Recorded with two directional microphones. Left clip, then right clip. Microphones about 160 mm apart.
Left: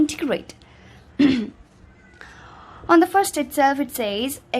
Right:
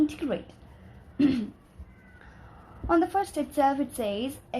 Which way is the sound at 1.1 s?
35° left (ahead or behind).